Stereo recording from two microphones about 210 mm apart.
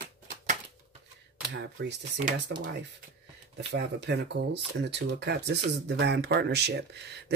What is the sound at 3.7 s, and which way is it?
Speech, 55° right (ahead or behind).